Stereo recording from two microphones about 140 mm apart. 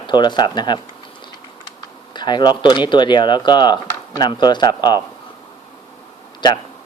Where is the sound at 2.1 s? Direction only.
30° left (ahead or behind).